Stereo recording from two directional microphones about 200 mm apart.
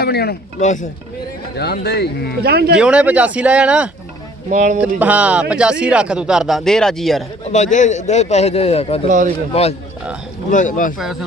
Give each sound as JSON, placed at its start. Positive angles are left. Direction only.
{"t": 0.0, "sound": "a man's voice", "side_deg": 50}
{"t": 0.6, "sound": "a man's voice", "side_deg": 35}
{"t": 1.5, "sound": "speech", "side_deg": 55}
{"t": 2.4, "sound": "speech", "side_deg": -50}
{"t": 2.7, "sound": "speech", "side_deg": -5}
{"t": 4.5, "sound": "a man's voice", "side_deg": -40}
{"t": 4.8, "sound": "speech", "side_deg": -5}
{"t": 7.5, "sound": "a man's voice", "side_deg": 35}
{"t": 9.0, "sound": "a man's voice", "side_deg": -40}
{"t": 9.5, "sound": "a man's voice", "side_deg": 30}
{"t": 10.9, "sound": "speech", "side_deg": 0}